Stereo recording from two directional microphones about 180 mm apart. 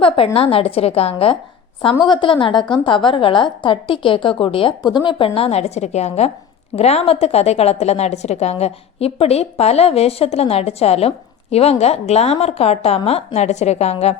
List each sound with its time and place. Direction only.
0.3 s a woman's voice: 30° left (ahead or behind)